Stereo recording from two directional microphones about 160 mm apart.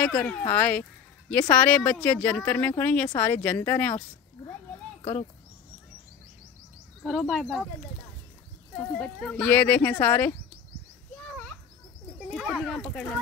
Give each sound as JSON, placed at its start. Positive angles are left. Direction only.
{"t": 0.0, "sound": "speech", "side_deg": 10}
{"t": 7.0, "sound": "speech", "side_deg": 0}
{"t": 8.7, "sound": "speech", "side_deg": 0}
{"t": 12.4, "sound": "speech", "side_deg": 0}